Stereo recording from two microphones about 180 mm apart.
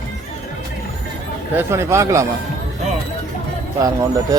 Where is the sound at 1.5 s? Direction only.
15° right (ahead or behind).